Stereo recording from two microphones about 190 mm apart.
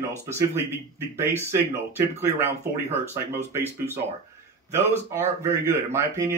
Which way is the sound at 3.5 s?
10° right (ahead or behind).